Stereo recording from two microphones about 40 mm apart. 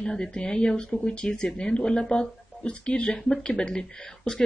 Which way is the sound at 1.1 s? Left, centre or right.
Left.